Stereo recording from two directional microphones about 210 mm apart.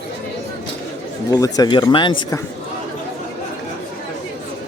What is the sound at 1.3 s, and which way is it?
Speech, 15° left (ahead or behind).